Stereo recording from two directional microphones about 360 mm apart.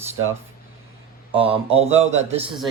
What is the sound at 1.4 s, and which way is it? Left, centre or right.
Speech, centre.